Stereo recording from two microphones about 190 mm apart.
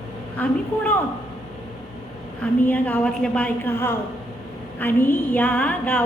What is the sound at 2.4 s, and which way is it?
A woman's voice, 10° left (ahead or behind).